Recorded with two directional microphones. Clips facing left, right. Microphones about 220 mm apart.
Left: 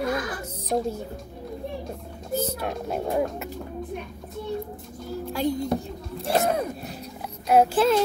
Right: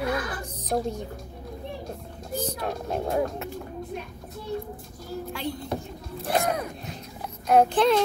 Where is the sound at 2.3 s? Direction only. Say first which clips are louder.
Left 2 dB; 5° left (ahead or behind).